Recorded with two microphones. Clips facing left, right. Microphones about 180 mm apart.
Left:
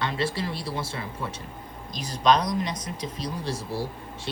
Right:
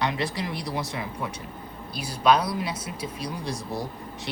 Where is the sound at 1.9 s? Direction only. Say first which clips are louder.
Even; 10° right (ahead or behind).